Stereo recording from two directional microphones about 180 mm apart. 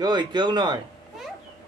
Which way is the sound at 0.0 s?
25° right (ahead or behind).